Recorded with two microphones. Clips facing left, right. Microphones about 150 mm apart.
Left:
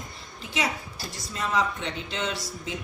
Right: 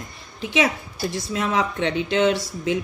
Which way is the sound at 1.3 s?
70° right (ahead or behind).